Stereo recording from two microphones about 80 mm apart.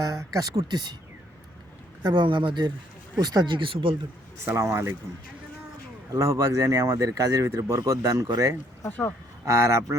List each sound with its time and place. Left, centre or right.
0.0 s speech: right
2.0 s speech: right
3.2 s speech: right
4.4 s speech: right
6.1 s speech: right
8.9 s speech: left
9.5 s speech: right